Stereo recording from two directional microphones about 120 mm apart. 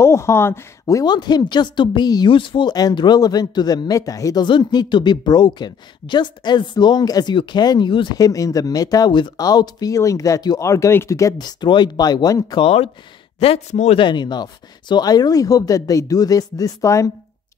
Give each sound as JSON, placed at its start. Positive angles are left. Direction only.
{"t": 0.0, "sound": "speech", "side_deg": 20}
{"t": 8.2, "sound": "speech", "side_deg": 30}
{"t": 12.6, "sound": "a man's voice", "side_deg": 55}
{"t": 13.9, "sound": "speech", "side_deg": 40}